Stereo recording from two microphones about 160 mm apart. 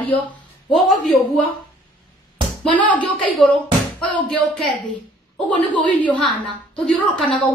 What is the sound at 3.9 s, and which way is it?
Music, 5° left (ahead or behind).